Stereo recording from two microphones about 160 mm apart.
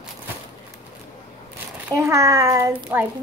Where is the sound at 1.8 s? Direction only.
20° right (ahead or behind).